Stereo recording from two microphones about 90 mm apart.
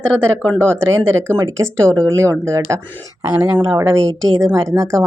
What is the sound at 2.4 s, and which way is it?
Speech, 30° right (ahead or behind).